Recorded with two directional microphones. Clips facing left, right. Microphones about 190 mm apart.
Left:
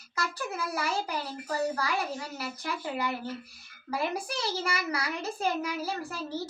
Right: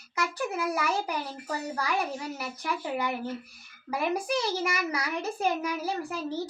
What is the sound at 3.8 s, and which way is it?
A child's voice, 15° right (ahead or behind).